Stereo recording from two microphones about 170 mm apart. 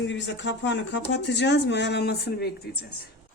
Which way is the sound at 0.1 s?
90° left.